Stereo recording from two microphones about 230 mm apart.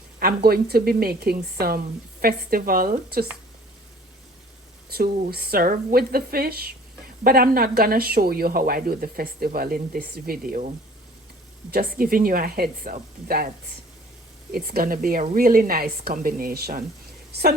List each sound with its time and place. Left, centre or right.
0.2 s speech: right
4.9 s speech: right
11.7 s speech: right
14.5 s a woman's voice: right